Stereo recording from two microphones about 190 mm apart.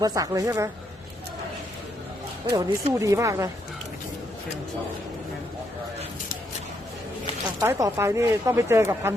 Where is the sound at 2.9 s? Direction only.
15° right (ahead or behind).